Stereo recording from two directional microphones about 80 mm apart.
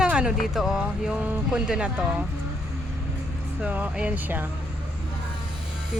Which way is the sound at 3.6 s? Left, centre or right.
Centre.